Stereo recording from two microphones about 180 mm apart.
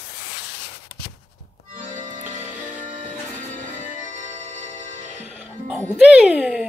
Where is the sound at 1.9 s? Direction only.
45° right (ahead or behind).